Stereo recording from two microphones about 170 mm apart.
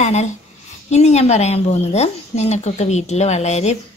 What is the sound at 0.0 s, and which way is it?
A woman's voice, 40° left (ahead or behind).